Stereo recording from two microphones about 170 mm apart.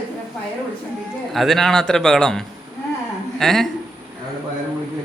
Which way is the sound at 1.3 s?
Centre (ahead or behind).